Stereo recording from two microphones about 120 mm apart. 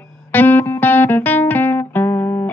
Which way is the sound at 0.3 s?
15° left (ahead or behind).